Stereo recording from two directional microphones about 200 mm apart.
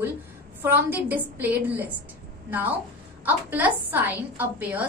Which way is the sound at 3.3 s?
10° right (ahead or behind).